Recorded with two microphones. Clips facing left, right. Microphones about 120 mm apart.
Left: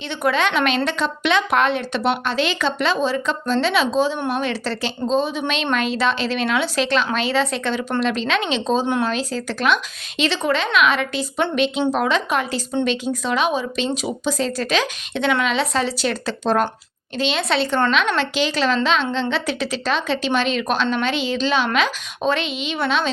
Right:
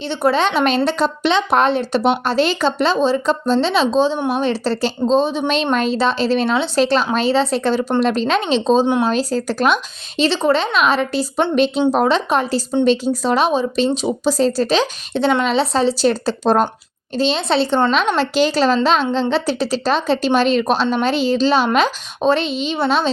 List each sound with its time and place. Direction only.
0.1 s speech: 30° right (ahead or behind)